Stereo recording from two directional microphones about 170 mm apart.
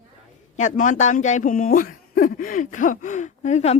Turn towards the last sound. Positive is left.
turn(degrees=40)  # may be behind; listen again after turning